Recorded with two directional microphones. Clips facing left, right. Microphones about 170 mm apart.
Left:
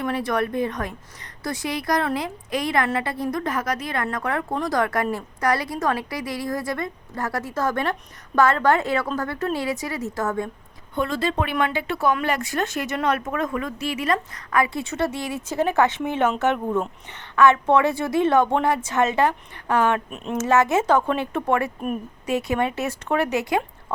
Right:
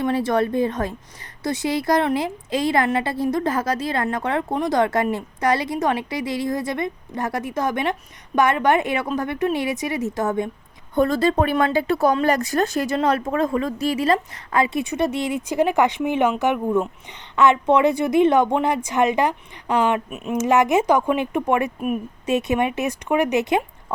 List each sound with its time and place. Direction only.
0.0 s speech: 25° right (ahead or behind)
10.9 s a woman's voice: 40° right (ahead or behind); by 20.0 s 15° right (ahead or behind)
20.1 s speech: 5° right (ahead or behind)
20.4 s a woman's voice: 15° right (ahead or behind)